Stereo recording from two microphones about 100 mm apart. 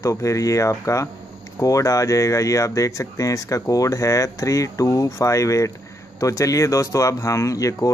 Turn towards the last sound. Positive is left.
turn(degrees=35)  # may be behind; listen again after turning